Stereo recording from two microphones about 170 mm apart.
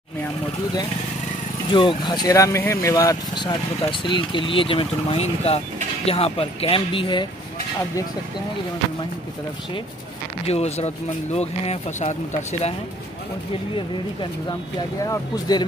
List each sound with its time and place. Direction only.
1.7 s speech: 25° left (ahead or behind)
10.4 s speech: 40° left (ahead or behind)
15.0 s speech: 20° left (ahead or behind)